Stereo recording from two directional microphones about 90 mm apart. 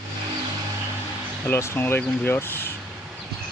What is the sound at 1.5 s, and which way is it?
Speech, 25° left (ahead or behind).